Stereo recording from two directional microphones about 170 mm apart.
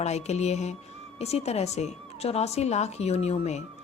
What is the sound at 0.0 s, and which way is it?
Speech, 40° left (ahead or behind).